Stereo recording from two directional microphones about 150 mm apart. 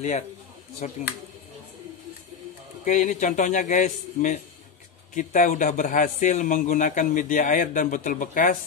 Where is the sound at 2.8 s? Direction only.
55° left (ahead or behind).